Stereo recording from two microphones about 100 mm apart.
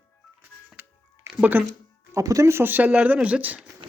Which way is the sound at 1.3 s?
15° right (ahead or behind).